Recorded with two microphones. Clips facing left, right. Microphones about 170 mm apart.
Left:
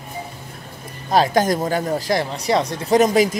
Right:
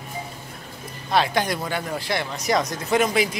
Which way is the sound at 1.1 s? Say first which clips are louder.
Left 5 dB; 40° left (ahead or behind).